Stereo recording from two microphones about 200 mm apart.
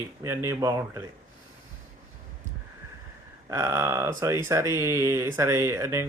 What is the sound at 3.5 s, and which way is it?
Speech, 15° right (ahead or behind).